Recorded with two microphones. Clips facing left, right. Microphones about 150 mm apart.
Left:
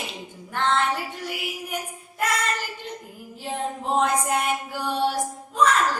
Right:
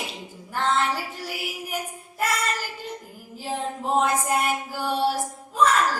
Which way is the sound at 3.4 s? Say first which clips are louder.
Even; centre (ahead or behind).